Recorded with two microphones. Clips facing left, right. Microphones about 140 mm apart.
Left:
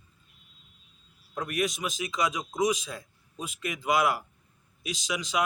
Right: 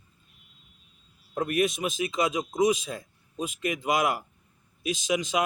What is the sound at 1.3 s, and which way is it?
Speech, 50° right (ahead or behind).